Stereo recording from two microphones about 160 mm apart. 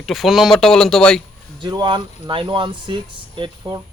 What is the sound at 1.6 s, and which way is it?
Speech, 30° right (ahead or behind).